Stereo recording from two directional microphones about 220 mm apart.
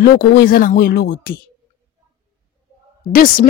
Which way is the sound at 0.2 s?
45° left (ahead or behind).